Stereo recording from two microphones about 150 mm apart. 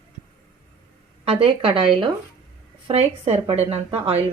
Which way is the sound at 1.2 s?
40° right (ahead or behind).